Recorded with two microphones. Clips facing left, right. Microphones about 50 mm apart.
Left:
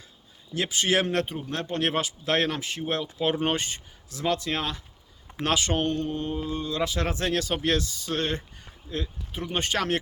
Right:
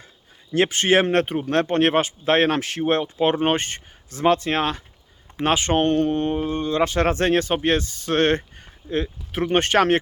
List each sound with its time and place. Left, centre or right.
0.5 s speech: right
2.5 s speech: right
2.8 s speech: right
5.4 s speech: right
7.3 s speech: right
8.2 s speech: right
8.6 s a sound: right
9.3 s speech: right